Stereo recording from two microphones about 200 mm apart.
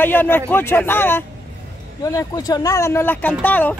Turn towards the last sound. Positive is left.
turn(degrees=10)  # may be behind; listen again after turning